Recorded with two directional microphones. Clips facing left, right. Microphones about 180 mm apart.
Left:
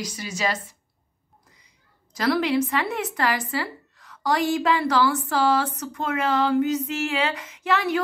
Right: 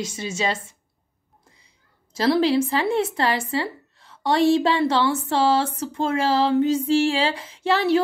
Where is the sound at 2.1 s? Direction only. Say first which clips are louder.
Right 3 dB; 30° right (ahead or behind).